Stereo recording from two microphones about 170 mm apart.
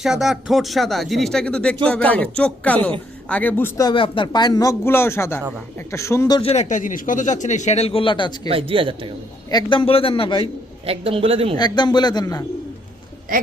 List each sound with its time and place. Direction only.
0.0 s speech: centre (ahead or behind)
3.8 s speech: 25° left (ahead or behind)
6.4 s speech: 40° left (ahead or behind)
8.4 s a man's voice: 35° right (ahead or behind)
9.5 s a man's voice: 25° left (ahead or behind)
10.8 s a man's voice: 30° right (ahead or behind)
11.5 s speech: 25° left (ahead or behind)